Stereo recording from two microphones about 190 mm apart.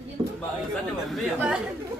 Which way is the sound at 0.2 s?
30° right (ahead or behind).